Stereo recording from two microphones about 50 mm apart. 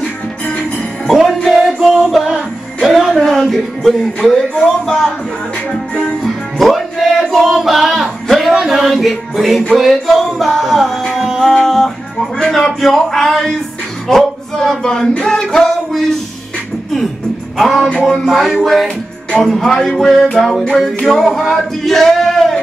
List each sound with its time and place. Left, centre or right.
0.0 s music: left
1.0 s music: centre
6.2 s music: centre
11.5 s speech: centre
14.0 s a sound: centre
15.2 s music: centre
17.6 s music: centre